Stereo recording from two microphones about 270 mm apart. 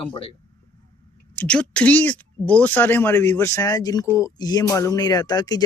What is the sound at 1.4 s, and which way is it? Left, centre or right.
Speech, centre.